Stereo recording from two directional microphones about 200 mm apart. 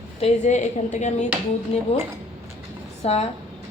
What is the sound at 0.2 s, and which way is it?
A woman's voice, 35° left (ahead or behind).